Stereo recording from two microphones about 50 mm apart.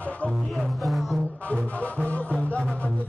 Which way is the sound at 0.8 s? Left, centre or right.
Centre.